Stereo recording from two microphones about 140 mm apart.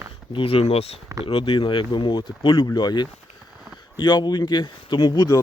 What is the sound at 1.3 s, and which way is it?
Speech, 35° left (ahead or behind).